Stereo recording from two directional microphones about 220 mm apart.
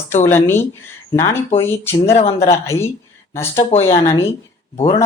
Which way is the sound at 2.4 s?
10° left (ahead or behind).